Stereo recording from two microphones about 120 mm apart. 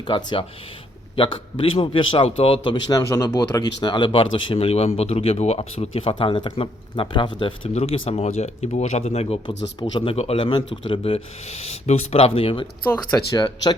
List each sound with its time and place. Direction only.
1.1 s speech: 45° left (ahead or behind)
3.1 s speech: 25° left (ahead or behind)
3.8 s speech: 40° left (ahead or behind)
7.7 s speech: 55° left (ahead or behind)
9.9 s speech: 45° left (ahead or behind)
13.1 s speech: 35° left (ahead or behind)